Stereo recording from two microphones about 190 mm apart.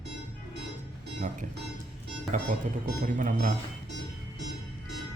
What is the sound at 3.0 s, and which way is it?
Speech, 45° right (ahead or behind).